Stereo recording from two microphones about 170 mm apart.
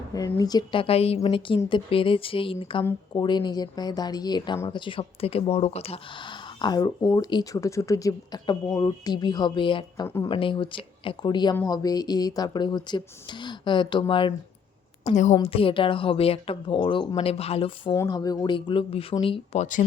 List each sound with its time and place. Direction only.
0.1 s a woman's voice: 20° left (ahead or behind)
15.0 s a woman's voice: 45° left (ahead or behind)
15.4 s a woman's voice: 35° left (ahead or behind)
17.9 s a woman's voice: 20° left (ahead or behind)